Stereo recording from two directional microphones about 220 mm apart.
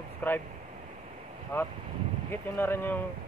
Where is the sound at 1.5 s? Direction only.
10° left (ahead or behind).